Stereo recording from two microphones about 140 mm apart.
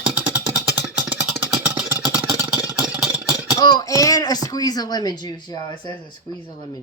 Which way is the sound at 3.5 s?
30° left (ahead or behind).